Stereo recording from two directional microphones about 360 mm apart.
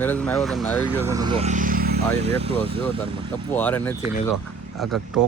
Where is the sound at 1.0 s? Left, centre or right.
Centre.